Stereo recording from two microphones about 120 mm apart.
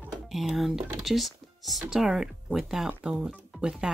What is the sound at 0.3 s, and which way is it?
Speech, centre (ahead or behind).